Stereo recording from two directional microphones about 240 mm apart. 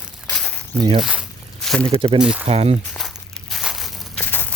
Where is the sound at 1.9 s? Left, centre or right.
Right.